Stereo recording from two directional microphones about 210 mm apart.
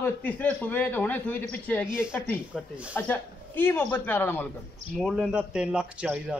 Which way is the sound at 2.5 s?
5° right (ahead or behind).